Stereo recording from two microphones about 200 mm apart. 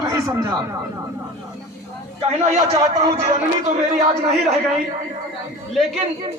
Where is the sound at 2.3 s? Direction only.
30° right (ahead or behind).